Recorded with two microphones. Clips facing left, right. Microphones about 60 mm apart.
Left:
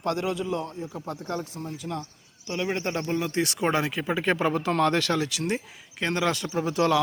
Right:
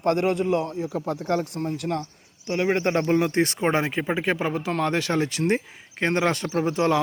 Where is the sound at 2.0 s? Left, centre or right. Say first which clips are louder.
Right 4 dB; right.